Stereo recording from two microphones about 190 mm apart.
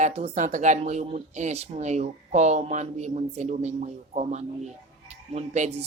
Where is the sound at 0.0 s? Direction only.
40° right (ahead or behind).